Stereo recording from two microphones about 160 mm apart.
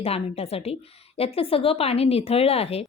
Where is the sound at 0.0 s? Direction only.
40° left (ahead or behind).